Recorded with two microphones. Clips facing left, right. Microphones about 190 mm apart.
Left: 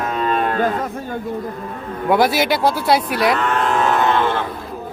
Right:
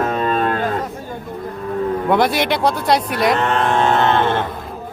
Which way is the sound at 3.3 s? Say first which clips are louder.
Right 2 dB; 25° right (ahead or behind).